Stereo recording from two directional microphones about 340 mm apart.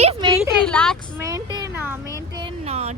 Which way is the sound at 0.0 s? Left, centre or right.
Centre.